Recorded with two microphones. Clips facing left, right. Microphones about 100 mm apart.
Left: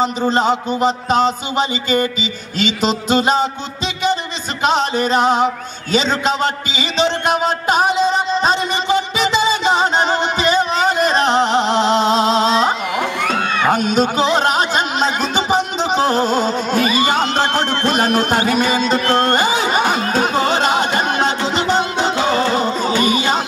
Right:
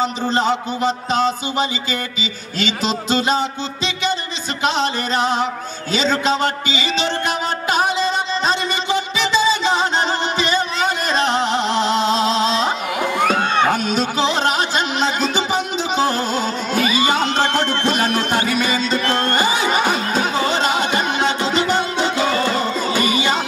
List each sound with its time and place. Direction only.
1.0 s music: 45° left (ahead or behind)
3.1 s music: 50° left (ahead or behind)
4.6 s music: 45° left (ahead or behind)
7.2 s music: 50° left (ahead or behind)
10.0 s music: 45° left (ahead or behind)
13.4 s music: 30° right (ahead or behind)
13.7 s music: 45° left (ahead or behind)
23.0 s music: 50° left (ahead or behind)